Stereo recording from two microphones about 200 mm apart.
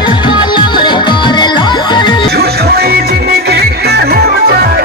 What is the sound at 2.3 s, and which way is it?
Music, 50° right (ahead or behind).